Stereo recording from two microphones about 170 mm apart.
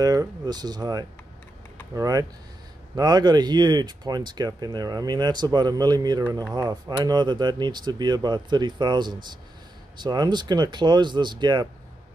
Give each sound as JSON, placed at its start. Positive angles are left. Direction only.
{"t": 0.0, "sound": "speech", "side_deg": -20}